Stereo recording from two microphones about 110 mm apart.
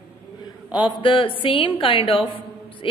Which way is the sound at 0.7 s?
45° left (ahead or behind).